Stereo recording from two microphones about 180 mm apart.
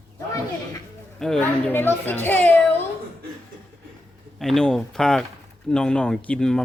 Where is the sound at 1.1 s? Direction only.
5° left (ahead or behind).